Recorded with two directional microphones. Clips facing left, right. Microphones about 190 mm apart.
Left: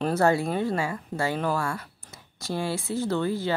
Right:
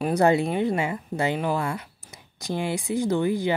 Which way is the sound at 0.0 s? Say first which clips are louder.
Right 2 dB; 15° right (ahead or behind).